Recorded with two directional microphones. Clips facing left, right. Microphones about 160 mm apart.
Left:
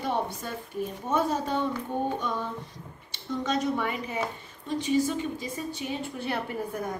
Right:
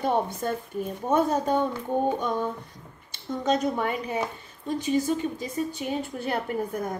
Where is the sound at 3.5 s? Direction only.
45° right (ahead or behind).